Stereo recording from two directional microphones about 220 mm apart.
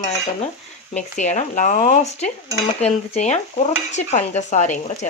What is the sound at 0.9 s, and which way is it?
Stir, 35° left (ahead or behind).